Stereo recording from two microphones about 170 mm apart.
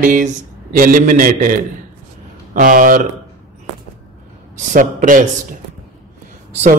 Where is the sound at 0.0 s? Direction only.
50° right (ahead or behind).